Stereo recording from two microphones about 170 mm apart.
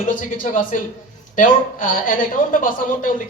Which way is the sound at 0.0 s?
50° left (ahead or behind).